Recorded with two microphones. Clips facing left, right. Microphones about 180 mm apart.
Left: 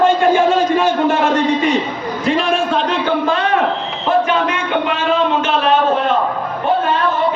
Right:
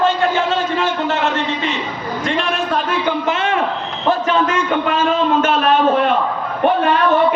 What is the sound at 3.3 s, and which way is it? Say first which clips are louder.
Speech: left 2 dB; 25° right (ahead or behind).